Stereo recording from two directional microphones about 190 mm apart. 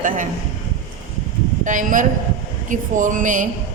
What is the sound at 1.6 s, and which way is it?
Speech, 45° right (ahead or behind).